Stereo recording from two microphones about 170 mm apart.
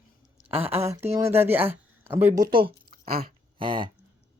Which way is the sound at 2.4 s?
30° right (ahead or behind).